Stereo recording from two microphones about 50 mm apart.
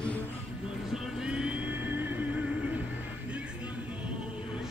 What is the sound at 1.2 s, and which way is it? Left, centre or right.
Vehicle, centre.